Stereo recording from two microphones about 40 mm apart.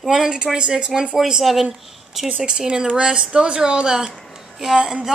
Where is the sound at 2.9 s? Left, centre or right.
Right.